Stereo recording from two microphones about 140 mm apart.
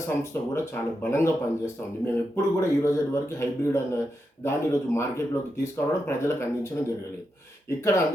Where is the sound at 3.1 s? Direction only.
20° left (ahead or behind).